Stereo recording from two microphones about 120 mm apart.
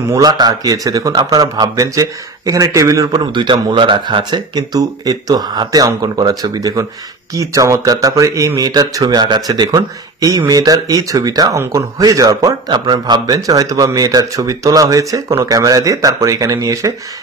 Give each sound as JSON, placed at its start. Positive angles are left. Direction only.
{"t": 0.1, "sound": "speech", "side_deg": -35}